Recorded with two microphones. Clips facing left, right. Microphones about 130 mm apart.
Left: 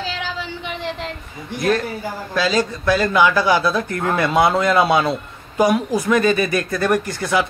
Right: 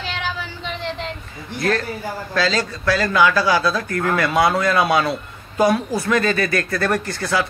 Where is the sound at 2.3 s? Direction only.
15° left (ahead or behind).